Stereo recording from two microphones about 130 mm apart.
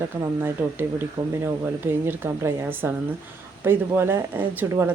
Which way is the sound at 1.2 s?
30° right (ahead or behind).